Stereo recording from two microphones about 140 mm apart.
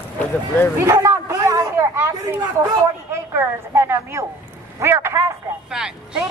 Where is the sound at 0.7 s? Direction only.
25° right (ahead or behind).